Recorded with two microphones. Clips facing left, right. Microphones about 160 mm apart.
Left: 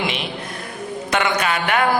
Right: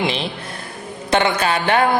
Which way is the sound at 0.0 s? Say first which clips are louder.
Right 3 dB; 30° right (ahead or behind).